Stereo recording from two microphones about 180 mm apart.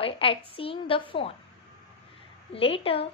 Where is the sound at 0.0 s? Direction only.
30° left (ahead or behind).